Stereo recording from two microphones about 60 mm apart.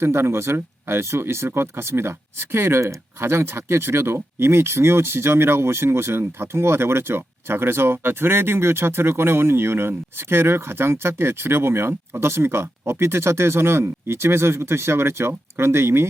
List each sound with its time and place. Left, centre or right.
0.0 s speech: right